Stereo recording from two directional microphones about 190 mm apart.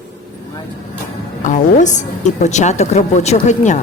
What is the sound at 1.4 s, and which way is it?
A woman's voice, 40° left (ahead or behind).